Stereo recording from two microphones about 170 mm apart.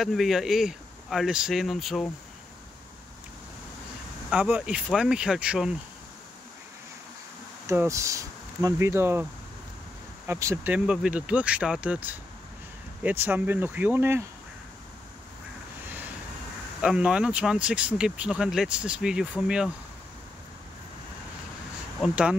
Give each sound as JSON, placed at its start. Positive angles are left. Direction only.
{"t": 0.0, "sound": "speech", "side_deg": 0}
{"t": 4.3, "sound": "speech", "side_deg": -5}
{"t": 7.6, "sound": "speech", "side_deg": -15}
{"t": 16.8, "sound": "speech", "side_deg": -5}
{"t": 22.0, "sound": "speech", "side_deg": -5}